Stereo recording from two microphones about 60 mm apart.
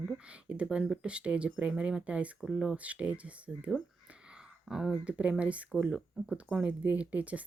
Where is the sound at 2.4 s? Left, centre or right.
Centre.